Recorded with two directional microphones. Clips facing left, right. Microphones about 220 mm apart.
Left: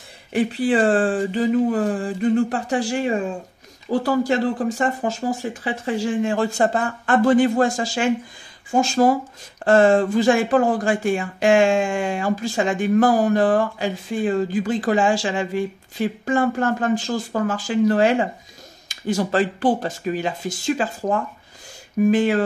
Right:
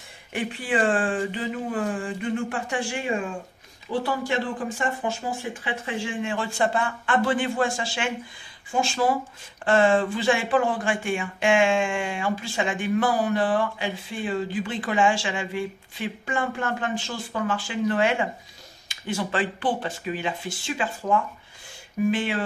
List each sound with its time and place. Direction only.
0.3 s speech: 35° left (ahead or behind)